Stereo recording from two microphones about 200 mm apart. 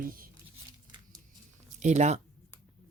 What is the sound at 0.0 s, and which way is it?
Speech, 45° right (ahead or behind).